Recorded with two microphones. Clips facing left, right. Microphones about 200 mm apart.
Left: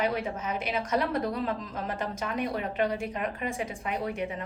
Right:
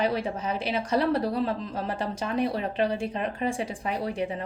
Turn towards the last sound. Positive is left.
turn(degrees=-30)  # may be behind; listen again after turning